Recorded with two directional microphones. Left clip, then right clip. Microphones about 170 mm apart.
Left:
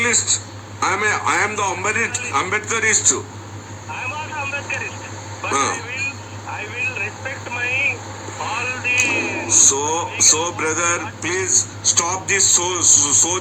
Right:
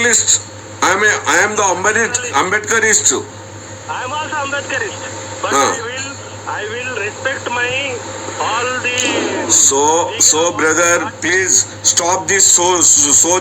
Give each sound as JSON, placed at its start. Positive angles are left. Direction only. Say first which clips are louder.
{"t": 0.0, "sound": "a man's voice", "louder": "right 5 dB", "side_deg": -45}
{"t": 3.9, "sound": "a sound", "louder": "right 6 dB", "side_deg": -55}
{"t": 5.4, "sound": "a man's voice", "louder": "right 6 dB", "side_deg": -45}